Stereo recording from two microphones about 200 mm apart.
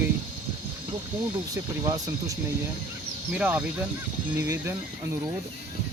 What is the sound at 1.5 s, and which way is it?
Speech, 15° right (ahead or behind).